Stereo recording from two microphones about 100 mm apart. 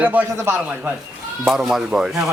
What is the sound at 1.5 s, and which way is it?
Speech, 5° right (ahead or behind).